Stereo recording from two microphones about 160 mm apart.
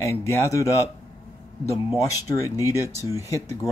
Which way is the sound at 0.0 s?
20° left (ahead or behind).